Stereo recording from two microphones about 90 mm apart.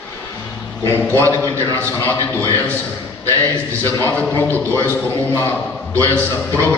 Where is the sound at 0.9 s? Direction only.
25° left (ahead or behind).